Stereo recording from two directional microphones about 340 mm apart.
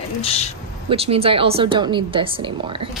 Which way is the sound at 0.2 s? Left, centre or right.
Centre.